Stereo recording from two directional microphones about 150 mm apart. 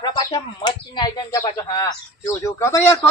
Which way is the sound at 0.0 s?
30° left (ahead or behind).